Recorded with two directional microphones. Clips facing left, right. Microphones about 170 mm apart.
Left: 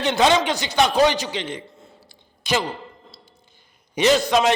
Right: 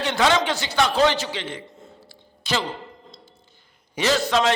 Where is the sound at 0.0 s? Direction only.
20° left (ahead or behind).